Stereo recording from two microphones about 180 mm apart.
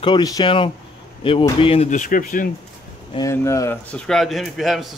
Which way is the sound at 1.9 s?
45° left (ahead or behind).